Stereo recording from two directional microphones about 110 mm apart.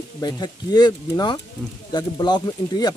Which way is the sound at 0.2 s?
40° left (ahead or behind).